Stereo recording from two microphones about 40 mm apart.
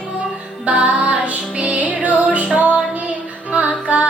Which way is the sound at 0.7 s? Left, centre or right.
Right.